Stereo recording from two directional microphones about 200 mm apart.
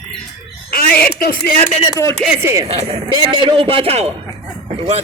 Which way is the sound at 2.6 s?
30° right (ahead or behind).